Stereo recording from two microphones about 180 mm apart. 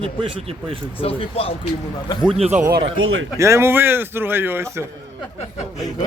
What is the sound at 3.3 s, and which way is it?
Speech, 15° right (ahead or behind).